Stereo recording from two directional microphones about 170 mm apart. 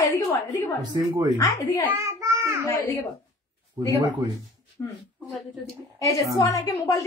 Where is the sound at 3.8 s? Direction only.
30° right (ahead or behind).